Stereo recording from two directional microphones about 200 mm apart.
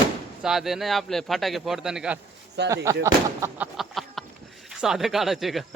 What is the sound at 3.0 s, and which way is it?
A man's voice, 10° right (ahead or behind).